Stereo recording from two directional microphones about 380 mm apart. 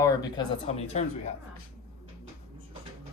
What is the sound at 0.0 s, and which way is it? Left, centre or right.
Speech, centre.